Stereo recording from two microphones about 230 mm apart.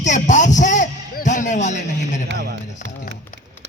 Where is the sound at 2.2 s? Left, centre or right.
Right.